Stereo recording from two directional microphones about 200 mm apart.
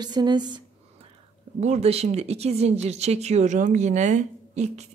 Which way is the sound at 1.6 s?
35° right (ahead or behind).